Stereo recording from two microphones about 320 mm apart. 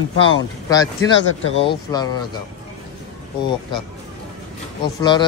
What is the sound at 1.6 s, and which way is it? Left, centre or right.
Speech, centre.